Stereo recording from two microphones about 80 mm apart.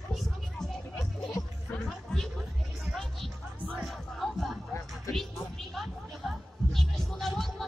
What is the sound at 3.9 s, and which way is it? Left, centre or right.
Music, centre.